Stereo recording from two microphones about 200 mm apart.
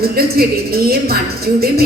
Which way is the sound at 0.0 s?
50° right (ahead or behind).